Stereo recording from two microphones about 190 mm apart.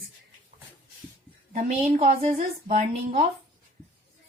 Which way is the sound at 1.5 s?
40° right (ahead or behind).